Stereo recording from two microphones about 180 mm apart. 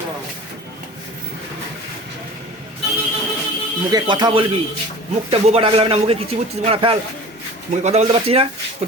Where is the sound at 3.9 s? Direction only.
25° right (ahead or behind).